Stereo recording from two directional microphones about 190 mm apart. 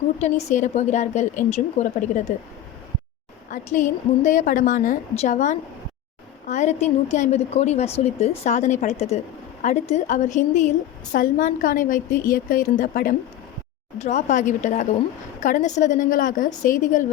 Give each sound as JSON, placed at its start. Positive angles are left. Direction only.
{"t": 0.5, "sound": "a woman's voice", "side_deg": 40}
{"t": 3.5, "sound": "a woman's voice", "side_deg": 40}